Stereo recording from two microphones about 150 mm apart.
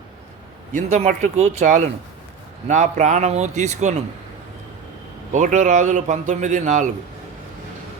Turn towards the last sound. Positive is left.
turn(degrees=-55)  # may be behind; listen again after turning